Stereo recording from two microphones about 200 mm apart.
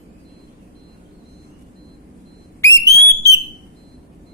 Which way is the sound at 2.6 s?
15° left (ahead or behind).